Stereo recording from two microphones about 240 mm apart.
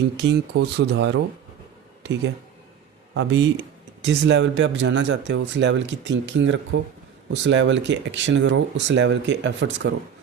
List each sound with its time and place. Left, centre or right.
0.2 s speech: right
3.2 s speech: right